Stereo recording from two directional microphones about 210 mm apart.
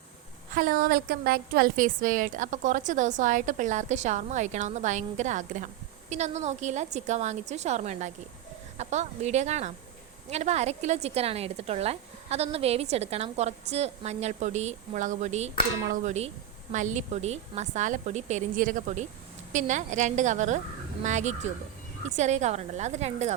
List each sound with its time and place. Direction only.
0.5 s a woman's voice: 45° right (ahead or behind)